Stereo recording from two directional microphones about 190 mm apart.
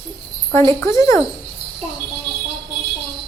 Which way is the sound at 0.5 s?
15° left (ahead or behind).